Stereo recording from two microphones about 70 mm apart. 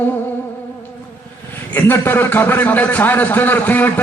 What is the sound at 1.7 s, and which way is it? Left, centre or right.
A man's voice, left.